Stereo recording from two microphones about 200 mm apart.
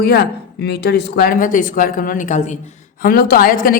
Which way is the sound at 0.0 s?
55° left (ahead or behind).